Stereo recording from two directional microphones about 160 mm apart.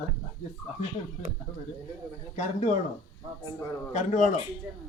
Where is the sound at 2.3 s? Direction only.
45° left (ahead or behind).